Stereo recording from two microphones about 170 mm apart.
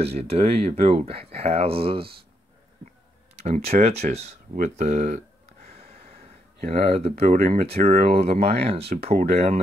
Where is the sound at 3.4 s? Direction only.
40° right (ahead or behind).